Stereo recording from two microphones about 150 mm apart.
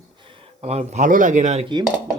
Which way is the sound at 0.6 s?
50° right (ahead or behind).